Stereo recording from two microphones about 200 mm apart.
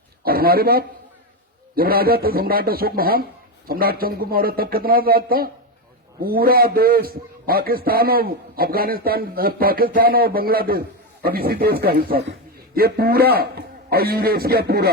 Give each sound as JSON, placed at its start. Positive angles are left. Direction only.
{"t": 0.3, "sound": "a man's voice", "side_deg": -50}